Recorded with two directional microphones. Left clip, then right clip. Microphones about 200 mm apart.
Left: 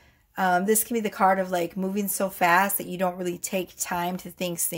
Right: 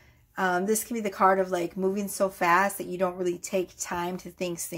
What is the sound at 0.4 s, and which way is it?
A woman's voice, 35° left (ahead or behind).